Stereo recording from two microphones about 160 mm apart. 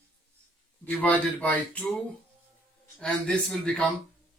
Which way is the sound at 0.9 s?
10° left (ahead or behind).